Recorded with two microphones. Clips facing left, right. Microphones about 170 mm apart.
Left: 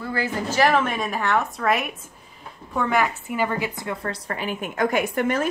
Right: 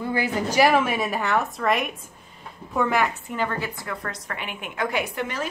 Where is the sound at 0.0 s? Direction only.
15° right (ahead or behind).